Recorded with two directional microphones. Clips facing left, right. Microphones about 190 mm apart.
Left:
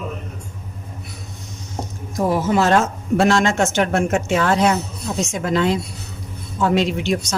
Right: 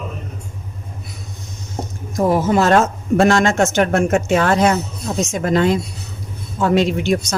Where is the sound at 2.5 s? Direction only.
50° right (ahead or behind).